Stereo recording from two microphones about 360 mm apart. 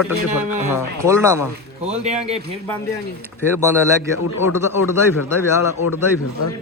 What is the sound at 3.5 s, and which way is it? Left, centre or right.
Speech, centre.